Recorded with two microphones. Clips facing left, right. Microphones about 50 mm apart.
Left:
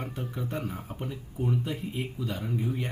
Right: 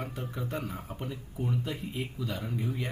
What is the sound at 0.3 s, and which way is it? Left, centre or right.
Speech, centre.